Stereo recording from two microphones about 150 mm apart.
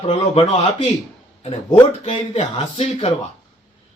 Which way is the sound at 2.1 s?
40° left (ahead or behind).